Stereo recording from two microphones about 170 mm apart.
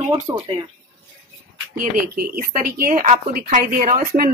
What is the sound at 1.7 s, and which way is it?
A woman's voice, 55° right (ahead or behind).